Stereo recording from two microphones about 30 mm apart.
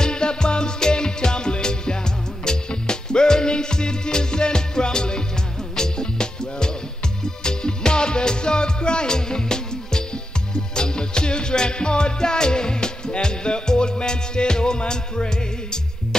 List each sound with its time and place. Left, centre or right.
0.0 s music: left